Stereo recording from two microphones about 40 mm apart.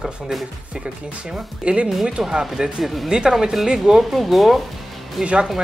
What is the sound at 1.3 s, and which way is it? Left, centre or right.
Speech, right.